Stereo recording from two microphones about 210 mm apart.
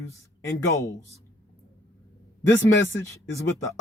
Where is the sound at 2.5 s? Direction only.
65° left (ahead or behind).